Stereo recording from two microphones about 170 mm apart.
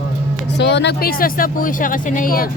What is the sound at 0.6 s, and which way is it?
Speech, 80° left.